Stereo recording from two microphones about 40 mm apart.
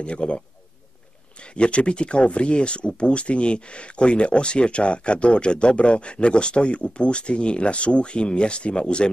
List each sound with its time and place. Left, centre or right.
0.0 s speech: left
1.4 s speech: left